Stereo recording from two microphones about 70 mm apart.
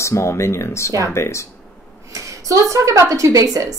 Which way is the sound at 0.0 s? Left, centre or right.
Left.